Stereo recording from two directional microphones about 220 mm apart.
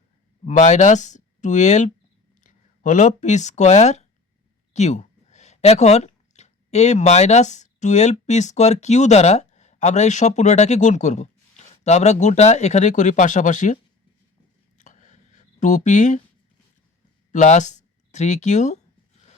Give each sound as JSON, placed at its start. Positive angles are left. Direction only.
{"t": 0.4, "sound": "speech", "side_deg": 35}
{"t": 14.8, "sound": "a sound", "side_deg": 35}
{"t": 15.6, "sound": "speech", "side_deg": 35}
{"t": 17.3, "sound": "speech", "side_deg": 35}